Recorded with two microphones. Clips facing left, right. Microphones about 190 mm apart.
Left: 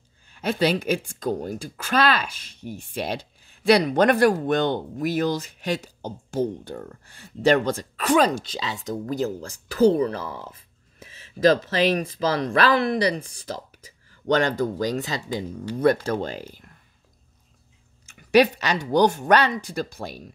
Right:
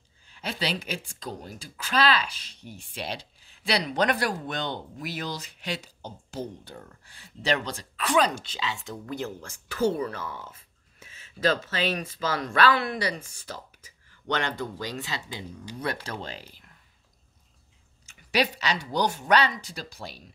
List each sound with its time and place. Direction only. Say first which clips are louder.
0.3 s speech: left 9 dB; 50° left (ahead or behind)
18.0 s speech: left 9 dB; 50° left (ahead or behind)